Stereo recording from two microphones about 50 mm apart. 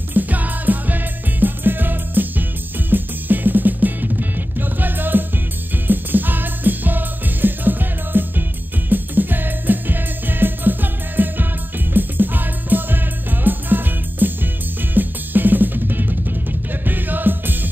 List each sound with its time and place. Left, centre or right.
0.1 s music: right